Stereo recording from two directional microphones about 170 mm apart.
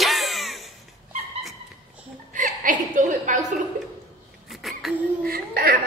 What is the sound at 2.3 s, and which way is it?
Chuckle, 50° right (ahead or behind).